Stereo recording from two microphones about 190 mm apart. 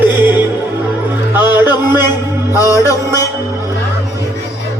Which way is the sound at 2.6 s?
20° left (ahead or behind).